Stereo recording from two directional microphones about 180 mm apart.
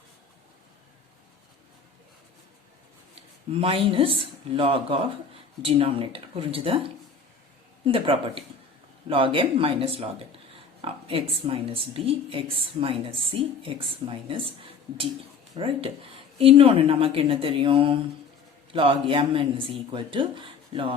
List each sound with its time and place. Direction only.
3.2 s speech: 30° right (ahead or behind)
15.5 s speech: 30° right (ahead or behind)